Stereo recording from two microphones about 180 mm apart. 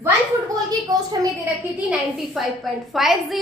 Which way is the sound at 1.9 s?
Centre (ahead or behind).